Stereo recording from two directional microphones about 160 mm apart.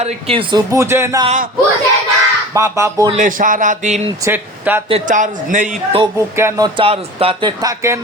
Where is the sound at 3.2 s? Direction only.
55° right (ahead or behind).